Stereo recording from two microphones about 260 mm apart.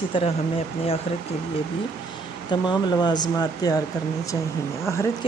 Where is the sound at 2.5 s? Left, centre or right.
Centre.